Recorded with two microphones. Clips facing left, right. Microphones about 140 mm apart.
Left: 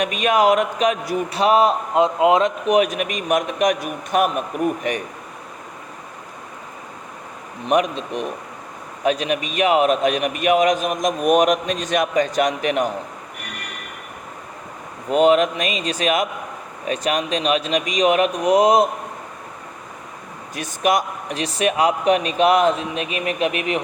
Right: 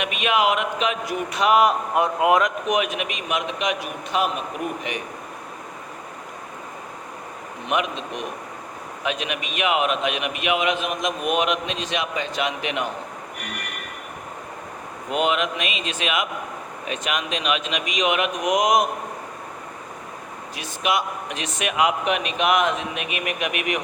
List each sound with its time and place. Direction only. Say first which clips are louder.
0.0 s a man's voice: left 4 dB; 40° left (ahead or behind)
7.7 s a man's voice: left 6 dB; 40° left (ahead or behind)
15.1 s a man's voice: left 7 dB; 40° left (ahead or behind)
20.6 s a man's voice: left 5 dB; 45° left (ahead or behind)